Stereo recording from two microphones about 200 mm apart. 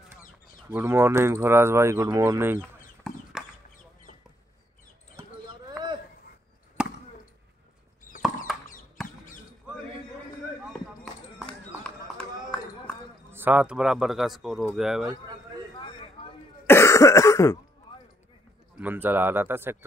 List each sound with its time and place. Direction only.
0.7 s speech: 10° right (ahead or behind)
3.1 s chicken: centre (ahead or behind)
5.1 s clip-clop: 20° right (ahead or behind)
6.8 s chop: 5° right (ahead or behind)
11.3 s run: 5° left (ahead or behind)
13.3 s a man's voice: 10° right (ahead or behind)
16.2 s throat clearing: 25° left (ahead or behind)
16.6 s cough: 15° left (ahead or behind)
17.9 s basketball bounce: 25° left (ahead or behind)
18.8 s speech: 10° right (ahead or behind)